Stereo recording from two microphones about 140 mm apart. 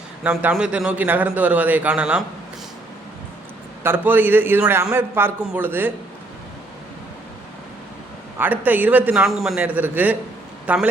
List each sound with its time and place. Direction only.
0.2 s a man's voice: 5° right (ahead or behind)
3.8 s a man's voice: 15° right (ahead or behind)
8.4 s a man's voice: 10° right (ahead or behind)